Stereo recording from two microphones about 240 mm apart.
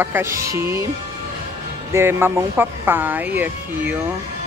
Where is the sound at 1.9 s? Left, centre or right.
Centre.